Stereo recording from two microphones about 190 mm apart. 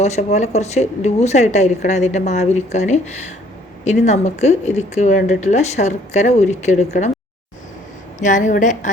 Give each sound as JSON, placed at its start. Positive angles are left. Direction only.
{"t": 0.0, "sound": "speech", "side_deg": 35}
{"t": 8.2, "sound": "speech", "side_deg": 40}